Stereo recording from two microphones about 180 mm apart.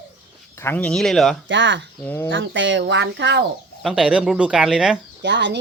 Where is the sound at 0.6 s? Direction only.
10° left (ahead or behind).